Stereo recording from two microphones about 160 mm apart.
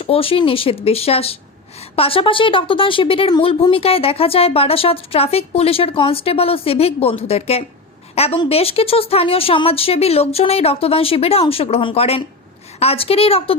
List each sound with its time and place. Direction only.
0.0 s a woman's voice: 35° left (ahead or behind)